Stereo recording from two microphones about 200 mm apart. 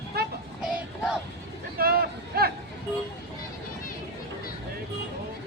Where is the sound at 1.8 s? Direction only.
50° right (ahead or behind).